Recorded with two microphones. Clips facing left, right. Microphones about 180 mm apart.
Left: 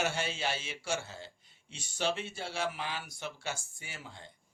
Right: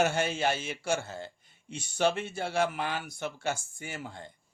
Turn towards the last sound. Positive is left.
turn(degrees=-50)  # may be behind; listen again after turning